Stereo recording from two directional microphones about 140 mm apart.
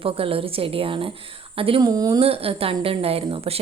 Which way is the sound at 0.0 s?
40° right (ahead or behind).